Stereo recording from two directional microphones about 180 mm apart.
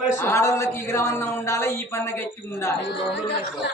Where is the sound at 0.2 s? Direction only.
15° left (ahead or behind).